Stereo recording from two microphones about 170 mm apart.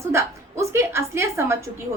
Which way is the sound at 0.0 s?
15° right (ahead or behind).